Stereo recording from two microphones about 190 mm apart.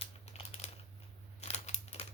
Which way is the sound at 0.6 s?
35° left (ahead or behind).